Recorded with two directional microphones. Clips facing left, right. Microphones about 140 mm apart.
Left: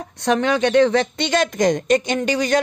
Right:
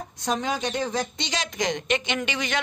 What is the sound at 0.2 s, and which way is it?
A woman's voice, 70° left (ahead or behind).